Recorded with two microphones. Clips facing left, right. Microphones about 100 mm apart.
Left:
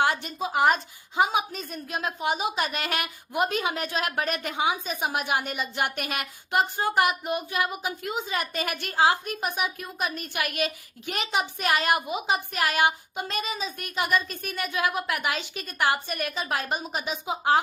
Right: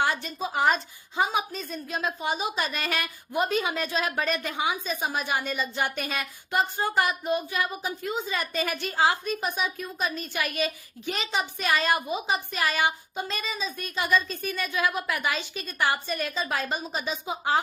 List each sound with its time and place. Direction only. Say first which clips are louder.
0.0 s a woman's voice: left 2 dB; 15° left (ahead or behind)